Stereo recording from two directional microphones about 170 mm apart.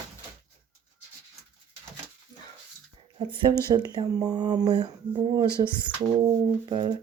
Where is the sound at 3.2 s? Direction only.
30° right (ahead or behind).